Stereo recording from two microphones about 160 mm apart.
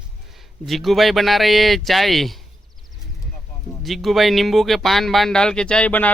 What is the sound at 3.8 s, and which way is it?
Speech, centre (ahead or behind).